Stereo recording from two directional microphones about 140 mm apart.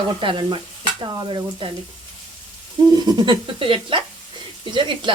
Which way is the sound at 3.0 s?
30° right (ahead or behind).